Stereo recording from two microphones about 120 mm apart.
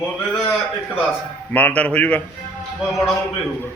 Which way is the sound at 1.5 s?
10° left (ahead or behind).